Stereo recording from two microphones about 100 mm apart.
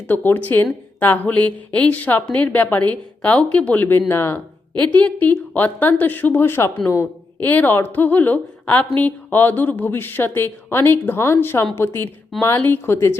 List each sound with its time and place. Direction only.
0.1 s a woman's voice: 20° left (ahead or behind)
7.3 s a woman's voice: 15° left (ahead or behind)